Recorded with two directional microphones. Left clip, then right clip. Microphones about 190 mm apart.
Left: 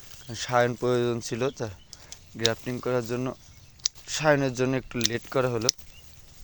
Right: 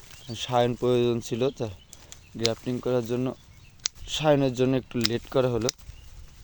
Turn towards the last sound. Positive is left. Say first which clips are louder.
# right 1 dB
turn(degrees=-25)  # may be behind; listen again after turning